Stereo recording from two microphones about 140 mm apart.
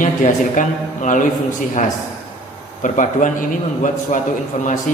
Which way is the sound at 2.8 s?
65° left (ahead or behind).